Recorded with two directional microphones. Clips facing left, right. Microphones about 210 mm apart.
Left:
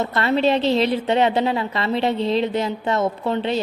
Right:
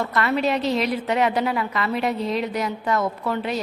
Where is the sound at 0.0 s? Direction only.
30° left (ahead or behind).